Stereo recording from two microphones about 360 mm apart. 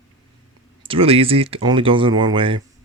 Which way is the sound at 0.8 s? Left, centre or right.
Centre.